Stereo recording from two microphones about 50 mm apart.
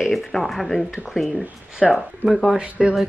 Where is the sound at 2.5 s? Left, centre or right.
Centre.